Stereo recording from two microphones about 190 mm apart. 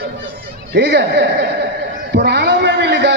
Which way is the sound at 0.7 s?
65° right (ahead or behind).